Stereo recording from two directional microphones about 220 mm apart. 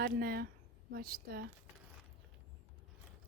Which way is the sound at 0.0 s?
45° right (ahead or behind).